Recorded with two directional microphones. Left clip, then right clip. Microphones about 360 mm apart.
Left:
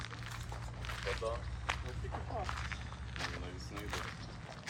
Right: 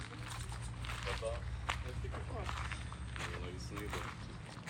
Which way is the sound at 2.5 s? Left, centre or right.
Centre.